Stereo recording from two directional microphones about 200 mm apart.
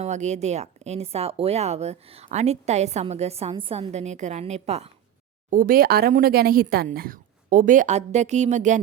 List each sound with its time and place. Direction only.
0.0 s a woman's voice: 35° right (ahead or behind)
5.5 s speech: 45° right (ahead or behind)